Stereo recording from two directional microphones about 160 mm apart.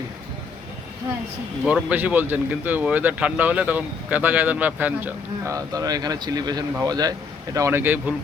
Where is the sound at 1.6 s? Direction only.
10° right (ahead or behind).